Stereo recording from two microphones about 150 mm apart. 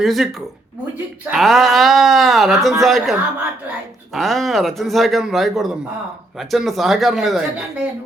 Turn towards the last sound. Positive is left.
turn(degrees=0)  # may be behind; listen again after turning